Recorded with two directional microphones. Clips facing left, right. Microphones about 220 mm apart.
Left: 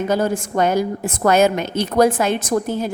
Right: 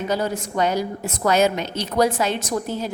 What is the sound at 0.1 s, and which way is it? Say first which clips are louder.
A woman's voice: left 3 dB; 50° left (ahead or behind).